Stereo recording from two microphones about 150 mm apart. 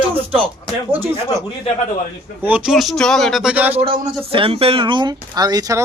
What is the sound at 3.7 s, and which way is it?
Speech, 40° right (ahead or behind).